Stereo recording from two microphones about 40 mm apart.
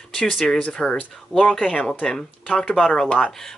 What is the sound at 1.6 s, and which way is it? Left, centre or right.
A man's voice, left.